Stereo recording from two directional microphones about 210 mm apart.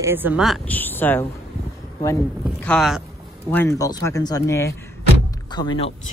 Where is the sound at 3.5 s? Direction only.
15° left (ahead or behind).